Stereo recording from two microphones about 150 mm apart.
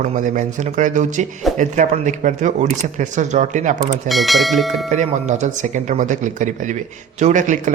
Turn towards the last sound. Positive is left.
turn(degrees=-55)  # may be behind; listen again after turning